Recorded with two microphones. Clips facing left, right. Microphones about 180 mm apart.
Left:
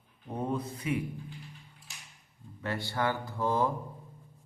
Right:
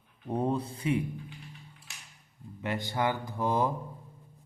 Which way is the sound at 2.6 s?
15° right (ahead or behind).